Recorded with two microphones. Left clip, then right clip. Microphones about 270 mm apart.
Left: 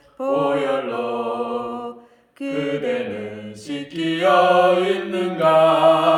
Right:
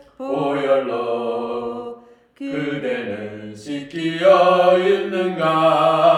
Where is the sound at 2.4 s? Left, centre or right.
Centre.